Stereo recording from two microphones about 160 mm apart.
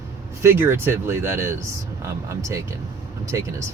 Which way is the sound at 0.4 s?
15° right (ahead or behind).